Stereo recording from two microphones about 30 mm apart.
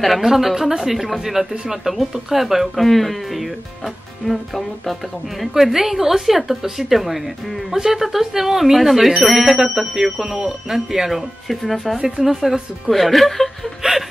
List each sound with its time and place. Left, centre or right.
0.2 s a woman's voice: centre
2.8 s speech: centre
5.5 s a woman's voice: centre
11.4 s speech: centre
13.8 s chuckle: right